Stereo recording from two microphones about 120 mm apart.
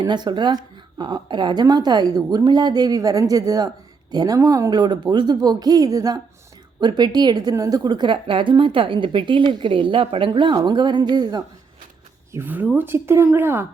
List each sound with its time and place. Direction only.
0.0 s a woman's voice: 40° right (ahead or behind)
12.3 s speech: 15° right (ahead or behind)